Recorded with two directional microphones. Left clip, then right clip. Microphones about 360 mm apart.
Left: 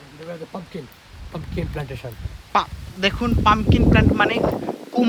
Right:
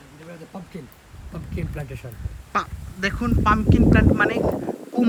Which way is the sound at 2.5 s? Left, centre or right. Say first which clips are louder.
Left 5 dB; centre.